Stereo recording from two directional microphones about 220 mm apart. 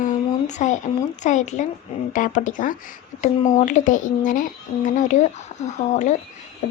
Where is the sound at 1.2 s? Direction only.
35° left (ahead or behind).